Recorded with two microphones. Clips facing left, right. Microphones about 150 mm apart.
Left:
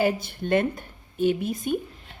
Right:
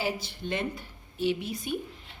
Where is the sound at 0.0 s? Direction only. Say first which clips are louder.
Left 8 dB; 55° left (ahead or behind).